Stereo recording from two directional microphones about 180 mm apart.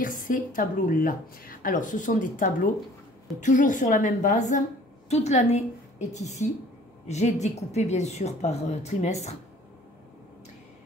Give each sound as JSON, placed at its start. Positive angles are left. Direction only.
{"t": 0.0, "sound": "a woman's voice", "side_deg": 50}